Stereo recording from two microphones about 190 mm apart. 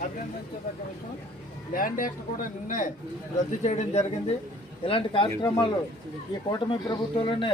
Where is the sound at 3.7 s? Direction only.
40° left (ahead or behind).